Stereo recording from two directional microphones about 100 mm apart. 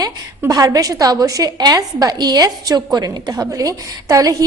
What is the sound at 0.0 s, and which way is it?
A woman's voice, 40° right (ahead or behind).